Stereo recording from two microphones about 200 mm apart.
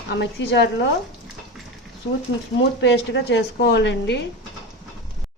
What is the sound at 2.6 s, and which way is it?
A woman's voice, 65° left (ahead or behind).